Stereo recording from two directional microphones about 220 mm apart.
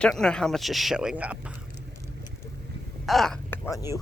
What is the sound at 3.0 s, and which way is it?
Speech, centre (ahead or behind).